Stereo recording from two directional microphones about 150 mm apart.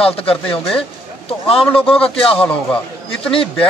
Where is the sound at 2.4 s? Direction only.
5° left (ahead or behind).